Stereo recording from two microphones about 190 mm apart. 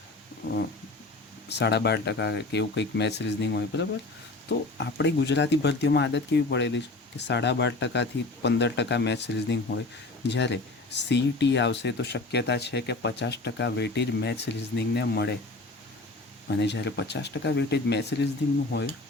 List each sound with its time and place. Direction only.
1.5 s speech: 60° left (ahead or behind)
16.5 s speech: 65° left (ahead or behind)